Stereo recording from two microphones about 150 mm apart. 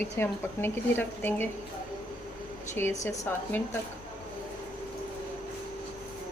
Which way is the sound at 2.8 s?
15° left (ahead or behind).